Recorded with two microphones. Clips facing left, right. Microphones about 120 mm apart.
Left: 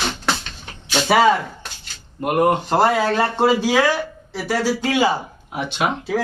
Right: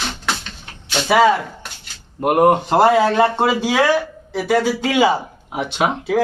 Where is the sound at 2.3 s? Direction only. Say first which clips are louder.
Right 3 dB; 20° right (ahead or behind).